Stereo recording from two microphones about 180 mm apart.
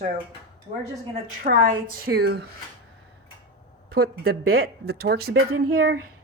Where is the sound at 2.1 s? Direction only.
65° right (ahead or behind).